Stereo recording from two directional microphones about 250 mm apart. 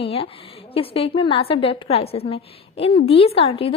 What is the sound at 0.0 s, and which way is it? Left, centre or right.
A woman's voice, left.